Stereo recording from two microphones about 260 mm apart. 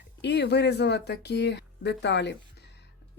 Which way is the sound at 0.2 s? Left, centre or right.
Left.